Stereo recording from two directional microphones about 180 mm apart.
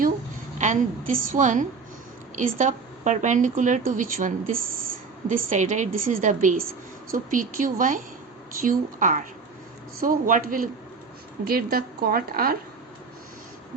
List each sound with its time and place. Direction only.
0.6 s a woman's voice: 45° right (ahead or behind)